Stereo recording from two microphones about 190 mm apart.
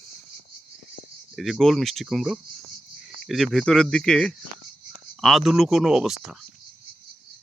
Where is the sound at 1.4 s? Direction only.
Centre (ahead or behind).